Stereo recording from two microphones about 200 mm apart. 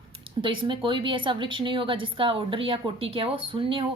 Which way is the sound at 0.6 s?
25° right (ahead or behind).